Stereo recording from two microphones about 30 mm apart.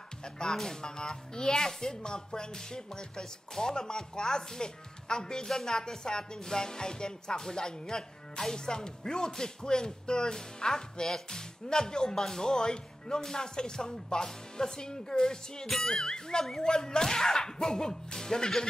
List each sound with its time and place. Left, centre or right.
0.4 s speech: centre
15.6 s speech: centre